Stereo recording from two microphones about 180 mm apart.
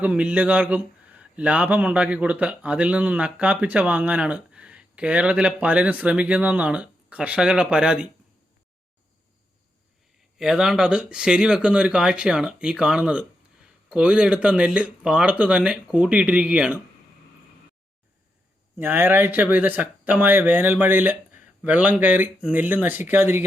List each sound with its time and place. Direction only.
0.0 s a man's voice: 5° right (ahead or behind)
10.3 s speech: centre (ahead or behind)
18.8 s a man's voice: 10° right (ahead or behind)